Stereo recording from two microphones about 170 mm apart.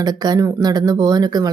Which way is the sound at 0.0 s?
25° right (ahead or behind).